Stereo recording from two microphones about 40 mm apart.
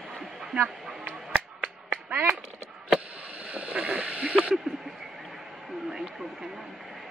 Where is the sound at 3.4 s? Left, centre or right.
Right.